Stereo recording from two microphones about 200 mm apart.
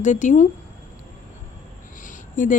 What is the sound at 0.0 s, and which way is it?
Speech, 35° left (ahead or behind).